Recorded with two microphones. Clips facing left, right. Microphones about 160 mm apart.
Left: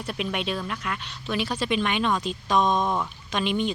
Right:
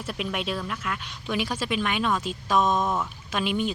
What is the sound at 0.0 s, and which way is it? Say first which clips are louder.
A woman's voice: left 1 dB; 5° right (ahead or behind).